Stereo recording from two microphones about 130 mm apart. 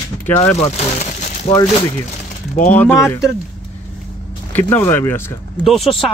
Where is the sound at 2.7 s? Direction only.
15° left (ahead or behind).